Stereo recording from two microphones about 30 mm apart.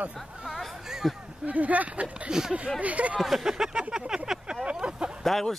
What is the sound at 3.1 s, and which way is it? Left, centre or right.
Speech, centre.